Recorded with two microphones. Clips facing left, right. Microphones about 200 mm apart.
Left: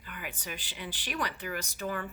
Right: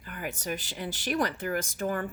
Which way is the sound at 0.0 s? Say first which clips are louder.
Right 6 dB; 45° right (ahead or behind).